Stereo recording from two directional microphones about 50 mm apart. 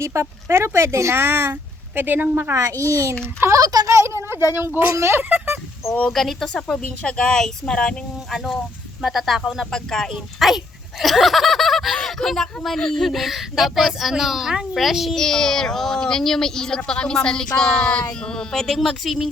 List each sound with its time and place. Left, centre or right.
0.0 s speech: right
1.2 s a woman's voice: right
2.6 s a child's voice: right
3.4 s a sound: right
4.5 s speech: right
5.1 s a sound: right
6.1 s speech: centre
6.5 s speech: centre
9.0 s speech: centre
9.7 s speech: centre
10.4 s speech: centre
11.0 s snicker: centre
11.9 s speech: centre
15.1 s speech: centre